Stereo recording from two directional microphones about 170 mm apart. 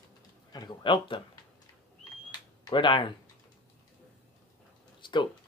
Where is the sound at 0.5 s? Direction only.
25° left (ahead or behind).